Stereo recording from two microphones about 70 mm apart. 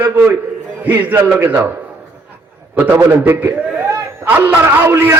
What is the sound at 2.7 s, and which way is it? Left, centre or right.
A man's voice, right.